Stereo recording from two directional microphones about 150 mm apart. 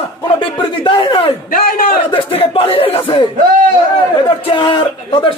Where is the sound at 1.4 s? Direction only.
70° left (ahead or behind).